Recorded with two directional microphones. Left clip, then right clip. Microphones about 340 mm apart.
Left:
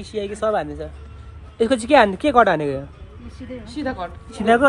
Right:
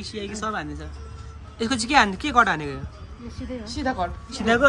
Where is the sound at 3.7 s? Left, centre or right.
Centre.